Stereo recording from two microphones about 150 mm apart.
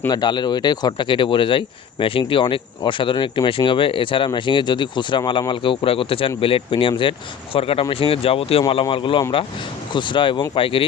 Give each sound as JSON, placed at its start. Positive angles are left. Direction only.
{"t": 0.1, "sound": "speech", "side_deg": 30}